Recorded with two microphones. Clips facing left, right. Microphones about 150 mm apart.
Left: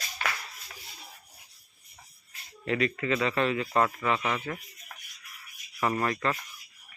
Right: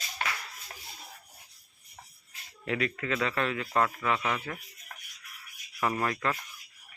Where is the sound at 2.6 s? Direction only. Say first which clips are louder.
Left 3 dB; 5° right (ahead or behind).